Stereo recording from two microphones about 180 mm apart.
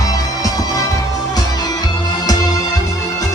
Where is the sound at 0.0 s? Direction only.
20° left (ahead or behind).